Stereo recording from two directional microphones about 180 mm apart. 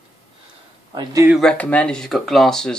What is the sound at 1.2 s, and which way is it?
Speech, centre (ahead or behind).